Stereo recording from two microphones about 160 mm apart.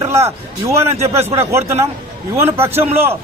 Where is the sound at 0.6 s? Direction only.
15° right (ahead or behind).